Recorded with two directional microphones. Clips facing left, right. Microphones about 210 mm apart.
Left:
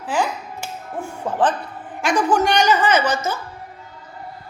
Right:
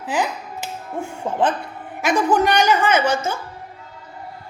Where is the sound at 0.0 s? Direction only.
20° right (ahead or behind).